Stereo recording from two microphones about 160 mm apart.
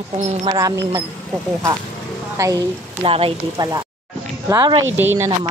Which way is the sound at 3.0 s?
35° right (ahead or behind).